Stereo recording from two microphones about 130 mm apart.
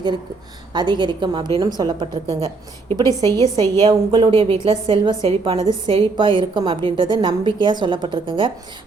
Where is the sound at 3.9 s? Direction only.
40° right (ahead or behind).